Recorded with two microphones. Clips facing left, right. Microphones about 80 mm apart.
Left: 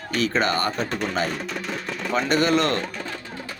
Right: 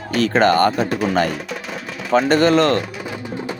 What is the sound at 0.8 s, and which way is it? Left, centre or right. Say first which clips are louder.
Speech: right 7 dB; centre.